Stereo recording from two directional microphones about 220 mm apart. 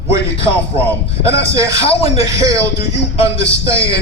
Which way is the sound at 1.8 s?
25° left (ahead or behind).